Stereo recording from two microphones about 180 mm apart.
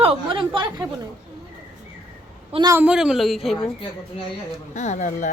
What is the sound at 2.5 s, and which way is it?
Speech, 25° right (ahead or behind).